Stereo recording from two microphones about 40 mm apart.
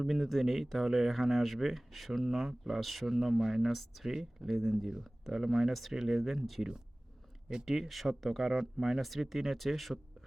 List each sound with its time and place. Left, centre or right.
0.0 s speech: centre
5.0 s a sound: centre
5.4 s speech: centre
8.4 s speech: centre
9.0 s speech: centre